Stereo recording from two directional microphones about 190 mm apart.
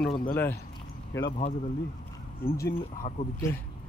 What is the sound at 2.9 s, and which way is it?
Speech, 35° left (ahead or behind).